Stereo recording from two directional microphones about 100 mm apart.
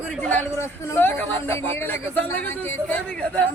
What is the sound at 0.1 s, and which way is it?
A man's voice, 15° left (ahead or behind).